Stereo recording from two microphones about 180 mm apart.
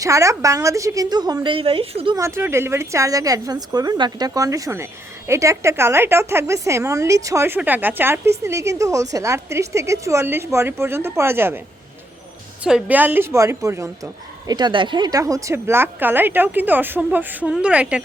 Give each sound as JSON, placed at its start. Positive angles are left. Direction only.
{"t": 0.0, "sound": "a woman's voice", "side_deg": -15}
{"t": 2.1, "sound": "a woman's voice", "side_deg": -15}
{"t": 12.6, "sound": "a woman's voice", "side_deg": -5}